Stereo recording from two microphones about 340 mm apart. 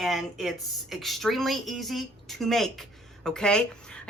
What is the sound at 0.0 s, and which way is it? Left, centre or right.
A woman's voice, centre.